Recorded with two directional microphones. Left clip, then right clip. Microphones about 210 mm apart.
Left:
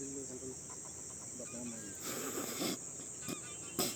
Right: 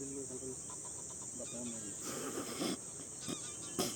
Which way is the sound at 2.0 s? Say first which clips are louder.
Left 1 dB; centre (ahead or behind).